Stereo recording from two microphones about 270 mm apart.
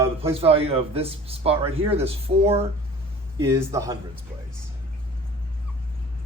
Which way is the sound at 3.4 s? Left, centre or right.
Centre.